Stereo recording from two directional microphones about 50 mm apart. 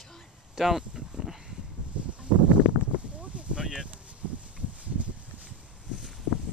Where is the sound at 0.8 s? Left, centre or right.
Centre.